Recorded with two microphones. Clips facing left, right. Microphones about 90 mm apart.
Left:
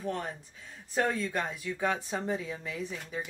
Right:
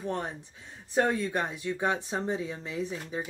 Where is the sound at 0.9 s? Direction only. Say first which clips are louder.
Right 3 dB; 20° right (ahead or behind).